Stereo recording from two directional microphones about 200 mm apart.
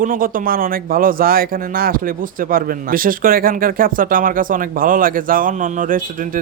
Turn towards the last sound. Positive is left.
turn(degrees=-40)  # may be behind; listen again after turning